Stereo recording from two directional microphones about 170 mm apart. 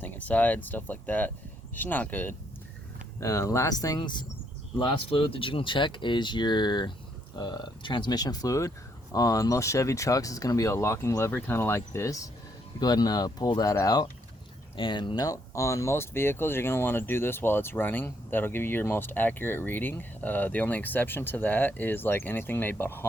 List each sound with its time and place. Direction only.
0.0 s speech: 10° left (ahead or behind)